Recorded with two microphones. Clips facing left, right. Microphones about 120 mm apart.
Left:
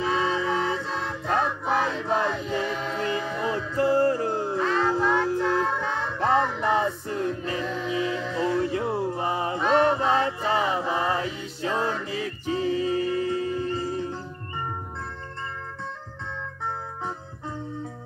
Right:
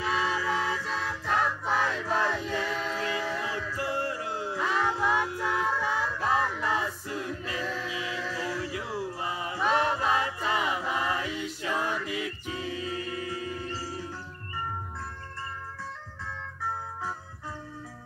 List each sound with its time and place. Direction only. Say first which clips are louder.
0.0 s music: left 4 dB; 25° left (ahead or behind)
4.6 s music: left 3 dB; 10° right (ahead or behind)
6.0 s music: left 5 dB; 25° left (ahead or behind)